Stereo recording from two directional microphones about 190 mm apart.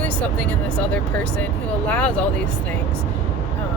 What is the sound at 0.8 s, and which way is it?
Speech, 5° left (ahead or behind).